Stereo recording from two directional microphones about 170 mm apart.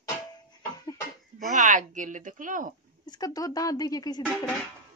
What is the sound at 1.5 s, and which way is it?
A woman's voice, 50° right (ahead or behind).